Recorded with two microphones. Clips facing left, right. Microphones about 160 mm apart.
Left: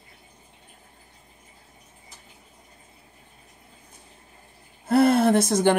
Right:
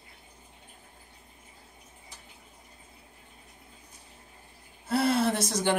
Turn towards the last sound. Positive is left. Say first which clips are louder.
# left 8 dB
turn(degrees=50)  # may be behind; listen again after turning